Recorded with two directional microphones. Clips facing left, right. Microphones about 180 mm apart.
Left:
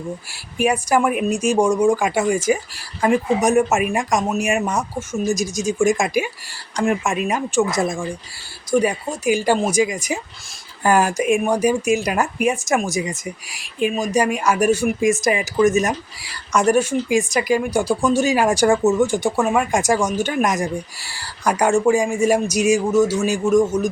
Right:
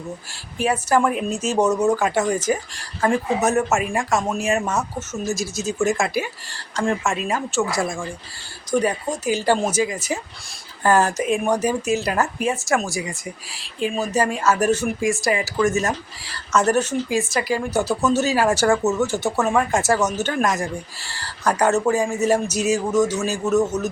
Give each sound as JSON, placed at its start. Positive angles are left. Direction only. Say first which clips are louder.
{"t": 0.6, "sound": "speech", "louder": "left 1 dB", "side_deg": 15}